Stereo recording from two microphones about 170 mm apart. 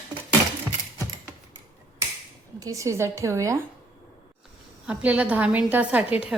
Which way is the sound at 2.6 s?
20° right (ahead or behind).